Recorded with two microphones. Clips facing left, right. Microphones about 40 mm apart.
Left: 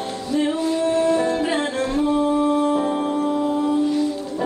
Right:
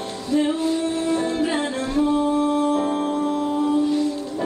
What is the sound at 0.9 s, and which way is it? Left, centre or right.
Music, left.